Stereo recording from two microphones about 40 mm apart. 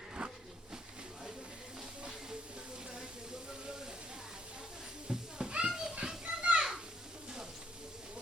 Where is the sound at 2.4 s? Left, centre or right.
Right.